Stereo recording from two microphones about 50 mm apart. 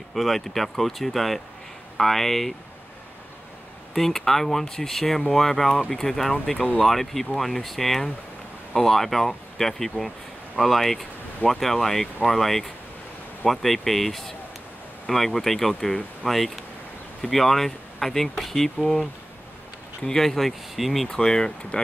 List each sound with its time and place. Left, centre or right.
0.1 s speech: centre
3.9 s speech: centre
21.1 s speech: centre